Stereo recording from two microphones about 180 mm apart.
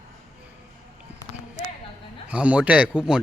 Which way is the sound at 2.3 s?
5° right (ahead or behind).